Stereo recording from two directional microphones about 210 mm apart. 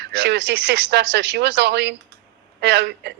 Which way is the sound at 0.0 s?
55° right (ahead or behind).